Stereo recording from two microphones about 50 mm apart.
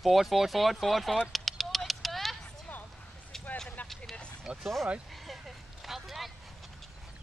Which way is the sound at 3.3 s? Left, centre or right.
Centre.